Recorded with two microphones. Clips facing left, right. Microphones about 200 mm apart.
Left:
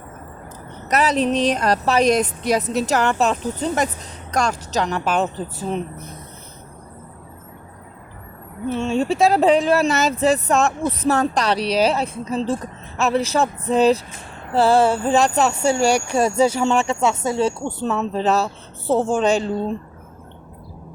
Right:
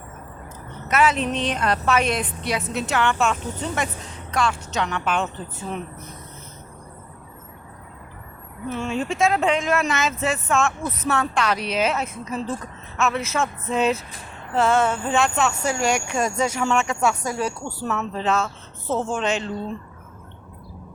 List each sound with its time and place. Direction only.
0.9 s speech: 35° left (ahead or behind)
8.7 s speech: 30° left (ahead or behind)